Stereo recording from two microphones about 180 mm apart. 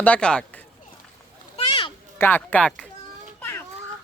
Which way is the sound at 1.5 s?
30° left (ahead or behind).